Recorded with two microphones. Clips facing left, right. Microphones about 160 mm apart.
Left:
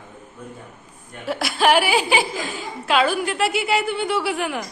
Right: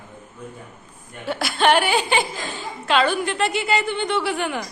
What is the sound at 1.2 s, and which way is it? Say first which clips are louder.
A woman's voice: even; centre (ahead or behind).